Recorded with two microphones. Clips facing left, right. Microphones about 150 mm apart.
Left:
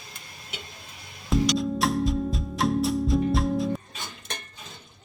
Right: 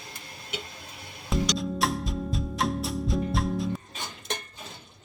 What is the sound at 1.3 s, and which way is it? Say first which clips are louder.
Music: left 4 dB; centre (ahead or behind).